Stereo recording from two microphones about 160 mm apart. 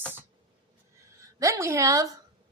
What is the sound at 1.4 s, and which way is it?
Speech, 20° right (ahead or behind).